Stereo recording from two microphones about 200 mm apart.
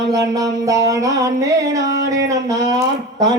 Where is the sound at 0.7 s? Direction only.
15° right (ahead or behind).